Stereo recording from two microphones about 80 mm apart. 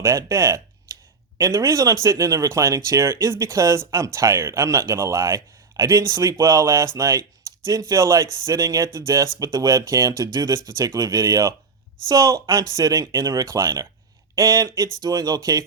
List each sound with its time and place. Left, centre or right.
0.0 s speech: right
0.9 s a sound: right
1.4 s speech: right